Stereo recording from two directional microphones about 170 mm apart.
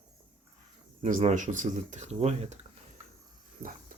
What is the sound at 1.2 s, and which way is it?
Speech, 45° right (ahead or behind).